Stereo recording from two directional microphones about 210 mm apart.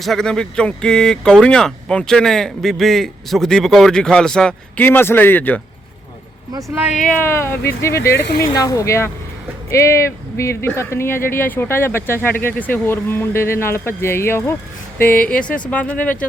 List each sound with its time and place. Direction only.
0.0 s speech: centre (ahead or behind)
6.5 s speech: 15° right (ahead or behind)
7.0 s speech: 10° left (ahead or behind)
8.1 s speech: 50° left (ahead or behind)
8.4 s speech: 15° left (ahead or behind)